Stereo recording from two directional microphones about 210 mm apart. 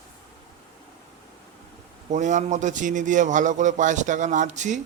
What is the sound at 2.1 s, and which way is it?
A man's voice, 35° right (ahead or behind).